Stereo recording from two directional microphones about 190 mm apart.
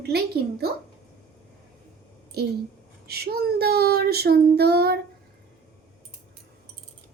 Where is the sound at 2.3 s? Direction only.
55° right (ahead or behind).